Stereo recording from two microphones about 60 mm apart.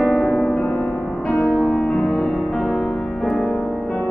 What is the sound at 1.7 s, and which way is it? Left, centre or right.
Music, left.